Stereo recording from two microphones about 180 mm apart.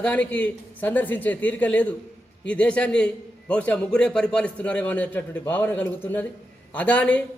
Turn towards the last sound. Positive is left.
turn(degrees=5)  # may be behind; listen again after turning